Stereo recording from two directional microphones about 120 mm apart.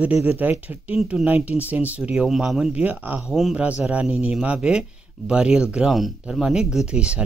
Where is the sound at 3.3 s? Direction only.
Centre (ahead or behind).